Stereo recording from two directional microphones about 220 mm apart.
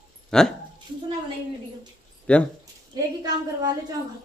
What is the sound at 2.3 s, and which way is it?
Speech, 5° left (ahead or behind).